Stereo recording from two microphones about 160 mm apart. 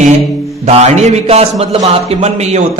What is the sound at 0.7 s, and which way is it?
A man's voice, 45° right (ahead or behind).